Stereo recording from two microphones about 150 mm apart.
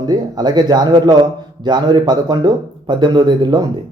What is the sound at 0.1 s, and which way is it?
Speech, 30° right (ahead or behind).